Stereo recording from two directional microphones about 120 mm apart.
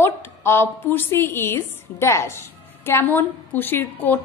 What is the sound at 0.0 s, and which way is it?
A woman's voice, 20° left (ahead or behind).